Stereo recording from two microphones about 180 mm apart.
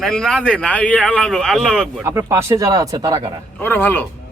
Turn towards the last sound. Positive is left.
turn(degrees=10)  # may be behind; listen again after turning